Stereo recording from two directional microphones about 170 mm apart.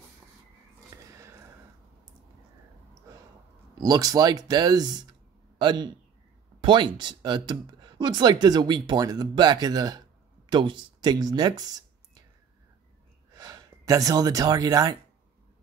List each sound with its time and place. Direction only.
0.8 s a sound: 20° right (ahead or behind)
3.7 s speech: 20° right (ahead or behind)
13.3 s speech: 20° right (ahead or behind)